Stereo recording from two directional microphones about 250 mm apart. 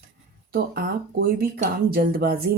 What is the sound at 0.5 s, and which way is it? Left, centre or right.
A woman's voice, right.